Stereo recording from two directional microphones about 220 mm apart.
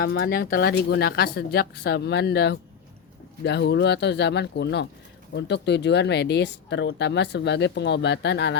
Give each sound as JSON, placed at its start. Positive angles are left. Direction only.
{"t": 0.0, "sound": "speech", "side_deg": 45}